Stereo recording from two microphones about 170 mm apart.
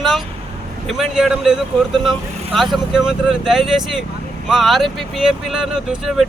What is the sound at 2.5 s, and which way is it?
Speech, centre (ahead or behind).